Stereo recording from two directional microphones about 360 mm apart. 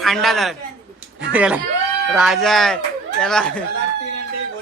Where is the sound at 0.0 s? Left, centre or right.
Centre.